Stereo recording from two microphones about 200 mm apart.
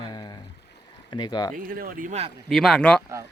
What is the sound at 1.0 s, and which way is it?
Speech, 20° left (ahead or behind).